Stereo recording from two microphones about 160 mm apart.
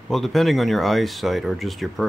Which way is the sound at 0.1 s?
Centre (ahead or behind).